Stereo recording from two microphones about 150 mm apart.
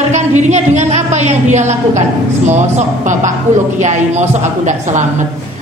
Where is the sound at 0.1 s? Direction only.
50° right (ahead or behind).